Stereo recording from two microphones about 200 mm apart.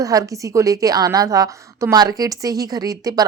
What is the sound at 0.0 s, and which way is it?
A woman's voice, 15° right (ahead or behind).